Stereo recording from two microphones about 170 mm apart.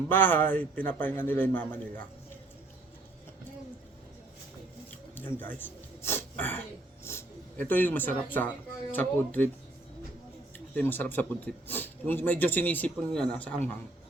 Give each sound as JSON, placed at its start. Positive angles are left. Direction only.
{"t": 0.1, "sound": "a man's voice", "side_deg": 10}
{"t": 5.1, "sound": "speech", "side_deg": 10}
{"t": 10.8, "sound": "a man's voice", "side_deg": 10}